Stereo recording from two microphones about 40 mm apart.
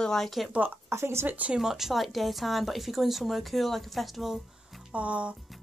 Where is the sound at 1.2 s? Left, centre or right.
Right.